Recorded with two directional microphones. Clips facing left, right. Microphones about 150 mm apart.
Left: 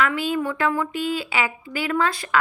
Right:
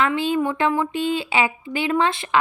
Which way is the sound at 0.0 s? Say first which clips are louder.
Right 2 dB; 25° right (ahead or behind).